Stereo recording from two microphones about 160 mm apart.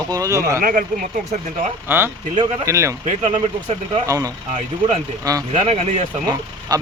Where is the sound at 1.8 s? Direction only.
15° right (ahead or behind).